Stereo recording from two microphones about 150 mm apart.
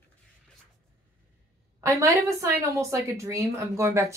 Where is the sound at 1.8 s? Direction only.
20° right (ahead or behind).